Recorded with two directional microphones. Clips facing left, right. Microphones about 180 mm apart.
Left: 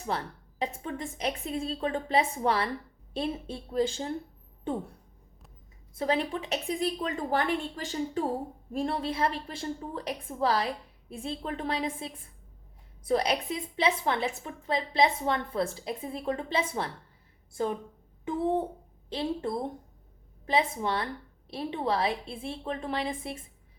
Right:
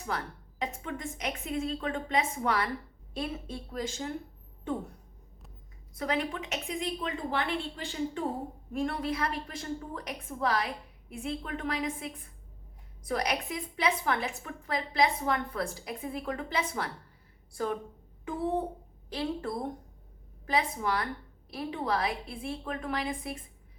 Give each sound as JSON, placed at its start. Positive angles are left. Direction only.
{"t": 0.0, "sound": "a sound", "side_deg": 30}
{"t": 0.8, "sound": "a woman's voice", "side_deg": 30}
{"t": 6.0, "sound": "a woman's voice", "side_deg": 30}
{"t": 19.1, "sound": "a woman's voice", "side_deg": 25}
{"t": 20.5, "sound": "a woman's voice", "side_deg": 25}